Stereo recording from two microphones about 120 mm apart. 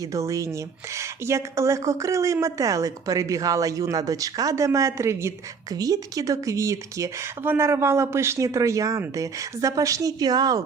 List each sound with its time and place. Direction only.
0.0 s speech: 25° right (ahead or behind)